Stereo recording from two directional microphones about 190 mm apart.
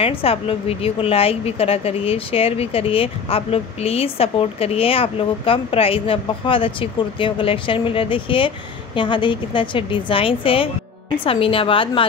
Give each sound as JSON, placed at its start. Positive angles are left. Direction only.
{"t": 0.0, "sound": "a woman's voice", "side_deg": 30}